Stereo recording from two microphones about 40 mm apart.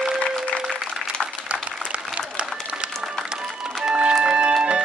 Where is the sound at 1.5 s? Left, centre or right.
Right.